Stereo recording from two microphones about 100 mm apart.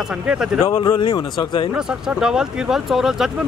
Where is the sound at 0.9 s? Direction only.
50° left (ahead or behind).